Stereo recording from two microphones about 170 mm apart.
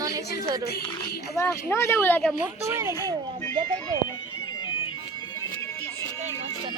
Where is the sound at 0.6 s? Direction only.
70° left (ahead or behind).